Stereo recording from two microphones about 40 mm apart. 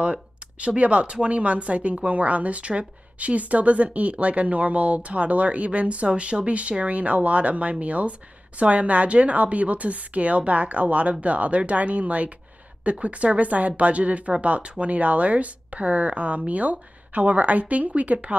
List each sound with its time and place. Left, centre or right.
0.0 s a woman's voice: right